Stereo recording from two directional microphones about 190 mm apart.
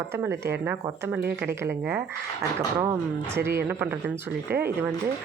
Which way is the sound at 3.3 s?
15° right (ahead or behind).